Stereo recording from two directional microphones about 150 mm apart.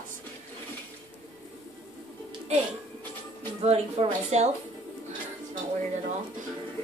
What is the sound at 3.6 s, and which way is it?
Speech, 40° right (ahead or behind).